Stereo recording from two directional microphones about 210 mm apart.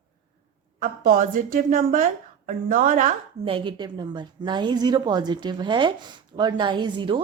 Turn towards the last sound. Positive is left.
turn(degrees=-20)  # may be behind; listen again after turning